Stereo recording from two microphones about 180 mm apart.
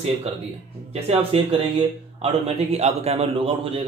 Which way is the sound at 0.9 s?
35° right (ahead or behind).